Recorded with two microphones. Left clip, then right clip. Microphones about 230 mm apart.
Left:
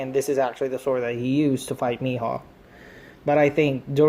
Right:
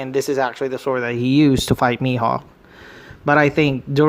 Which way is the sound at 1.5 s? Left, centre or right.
Right.